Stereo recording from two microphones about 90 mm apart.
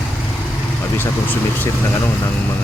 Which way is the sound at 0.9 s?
20° left (ahead or behind).